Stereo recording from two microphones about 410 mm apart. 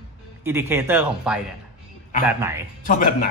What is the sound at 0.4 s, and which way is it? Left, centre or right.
Speech, centre.